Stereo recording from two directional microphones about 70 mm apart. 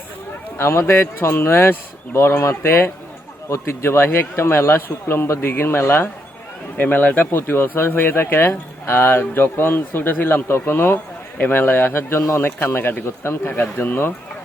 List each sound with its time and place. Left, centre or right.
0.5 s speech: left
6.7 s speech: left